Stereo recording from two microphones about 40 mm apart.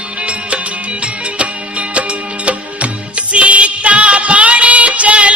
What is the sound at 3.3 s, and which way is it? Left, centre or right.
Music, right.